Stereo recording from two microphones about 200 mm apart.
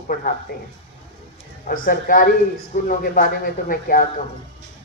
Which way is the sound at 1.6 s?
45° left (ahead or behind).